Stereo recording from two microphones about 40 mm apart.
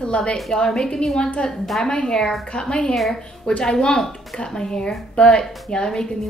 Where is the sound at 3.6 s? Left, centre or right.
Left.